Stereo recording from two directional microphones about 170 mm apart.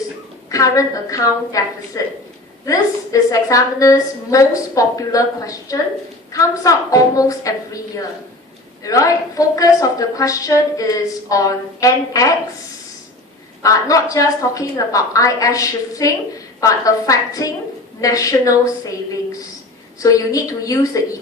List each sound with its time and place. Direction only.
0.5 s a woman's voice: 20° left (ahead or behind)
8.8 s a woman's voice: 20° left (ahead or behind)
13.6 s a woman's voice: 20° left (ahead or behind)
20.0 s a woman's voice: 20° left (ahead or behind)